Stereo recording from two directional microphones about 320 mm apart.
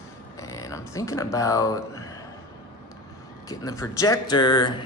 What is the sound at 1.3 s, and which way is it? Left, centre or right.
Speech, centre.